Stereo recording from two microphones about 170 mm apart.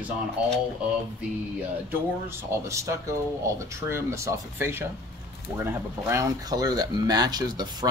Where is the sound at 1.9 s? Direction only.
15° right (ahead or behind).